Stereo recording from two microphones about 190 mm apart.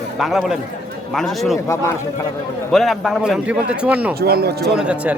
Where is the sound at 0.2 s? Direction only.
Centre (ahead or behind).